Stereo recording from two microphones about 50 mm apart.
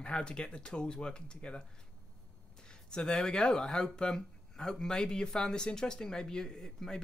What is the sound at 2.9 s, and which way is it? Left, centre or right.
Speech, centre.